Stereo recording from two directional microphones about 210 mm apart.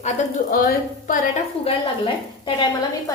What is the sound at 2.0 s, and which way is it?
A woman's voice, 25° left (ahead or behind).